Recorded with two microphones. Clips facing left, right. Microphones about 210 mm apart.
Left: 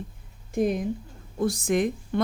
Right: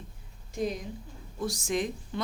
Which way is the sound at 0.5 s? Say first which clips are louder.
Left 8 dB; 55° left (ahead or behind).